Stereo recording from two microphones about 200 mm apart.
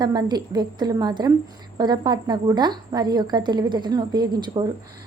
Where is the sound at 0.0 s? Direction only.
20° right (ahead or behind).